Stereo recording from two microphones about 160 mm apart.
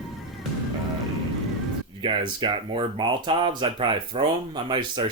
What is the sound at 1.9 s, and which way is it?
Speech, 30° right (ahead or behind).